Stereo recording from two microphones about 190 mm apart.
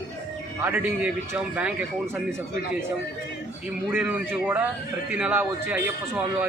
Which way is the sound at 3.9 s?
10° right (ahead or behind).